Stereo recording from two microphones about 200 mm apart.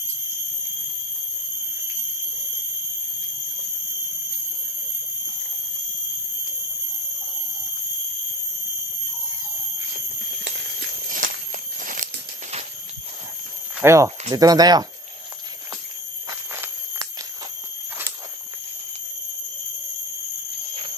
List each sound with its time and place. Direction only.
11.1 s walk: 45° right (ahead or behind)
13.7 s speech: 15° right (ahead or behind)
16.3 s a sound: 15° right (ahead or behind)